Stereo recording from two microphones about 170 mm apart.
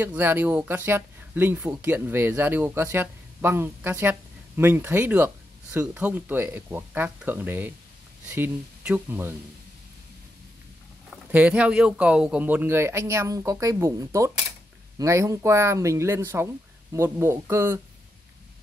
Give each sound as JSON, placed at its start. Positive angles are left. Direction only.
{"t": 0.0, "sound": "speech", "side_deg": -10}
{"t": 11.3, "sound": "speech", "side_deg": -10}